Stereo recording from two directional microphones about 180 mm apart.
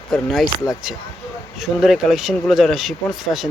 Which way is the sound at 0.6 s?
20° left (ahead or behind).